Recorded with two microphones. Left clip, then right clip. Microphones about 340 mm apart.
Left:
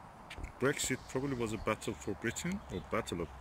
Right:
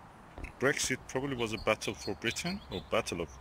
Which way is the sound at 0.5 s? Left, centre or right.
Centre.